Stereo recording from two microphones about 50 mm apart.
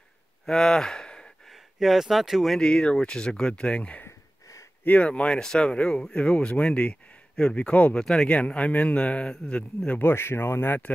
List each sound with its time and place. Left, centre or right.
0.5 s a sound: centre
1.5 s speech: centre
2.6 s speech: centre
5.2 s speech: centre
8.0 s speech: centre
8.3 s speech: left
9.8 s speech: left